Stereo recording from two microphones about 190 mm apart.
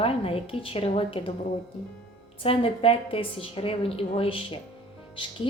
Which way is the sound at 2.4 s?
30° left (ahead or behind).